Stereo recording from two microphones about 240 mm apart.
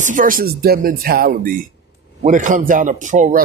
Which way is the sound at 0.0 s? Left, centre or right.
Right.